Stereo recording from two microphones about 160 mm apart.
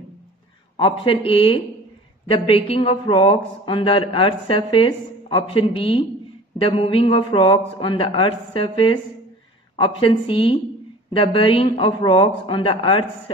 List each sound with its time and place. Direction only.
0.7 s speech: 35° left (ahead or behind)